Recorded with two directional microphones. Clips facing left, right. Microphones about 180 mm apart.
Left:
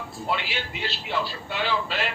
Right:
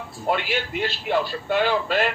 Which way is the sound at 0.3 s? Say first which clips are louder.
Right 6 dB; 50° right (ahead or behind).